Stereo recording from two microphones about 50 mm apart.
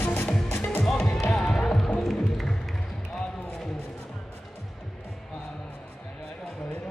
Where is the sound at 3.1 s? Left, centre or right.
Centre.